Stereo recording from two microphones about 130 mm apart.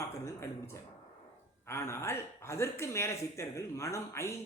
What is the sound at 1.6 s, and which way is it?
Speech, 20° left (ahead or behind).